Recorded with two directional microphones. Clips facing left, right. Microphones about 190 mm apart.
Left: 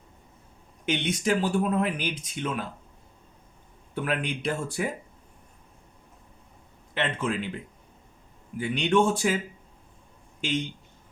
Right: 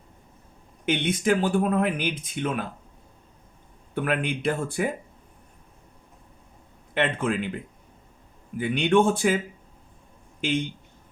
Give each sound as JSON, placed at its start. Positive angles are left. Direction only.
{"t": 0.9, "sound": "speech", "side_deg": -55}
{"t": 3.9, "sound": "speech", "side_deg": -55}
{"t": 6.9, "sound": "speech", "side_deg": -55}
{"t": 8.5, "sound": "speech", "side_deg": -55}